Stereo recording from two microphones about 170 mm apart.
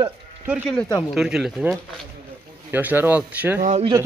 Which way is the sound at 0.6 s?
5° left (ahead or behind).